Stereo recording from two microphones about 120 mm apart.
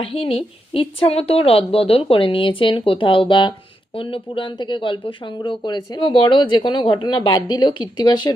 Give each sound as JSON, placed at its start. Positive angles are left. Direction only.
{"t": 0.0, "sound": "a woman's voice", "side_deg": 50}